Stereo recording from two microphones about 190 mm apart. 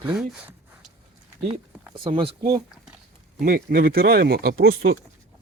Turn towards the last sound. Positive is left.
turn(degrees=-50)  # may be behind; listen again after turning